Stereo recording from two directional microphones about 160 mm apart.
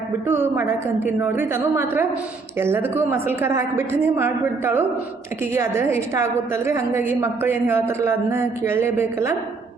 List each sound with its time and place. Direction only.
0.3 s a woman's voice: 15° right (ahead or behind)